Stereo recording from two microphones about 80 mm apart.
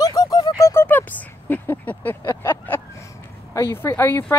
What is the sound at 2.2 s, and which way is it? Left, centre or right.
Vehicle, left.